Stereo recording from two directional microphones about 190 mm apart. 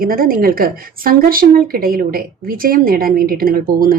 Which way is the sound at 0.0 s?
50° right (ahead or behind).